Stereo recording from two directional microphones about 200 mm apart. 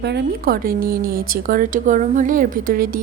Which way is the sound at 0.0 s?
55° right (ahead or behind).